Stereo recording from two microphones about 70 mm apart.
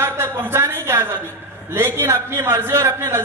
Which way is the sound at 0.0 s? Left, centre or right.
Right.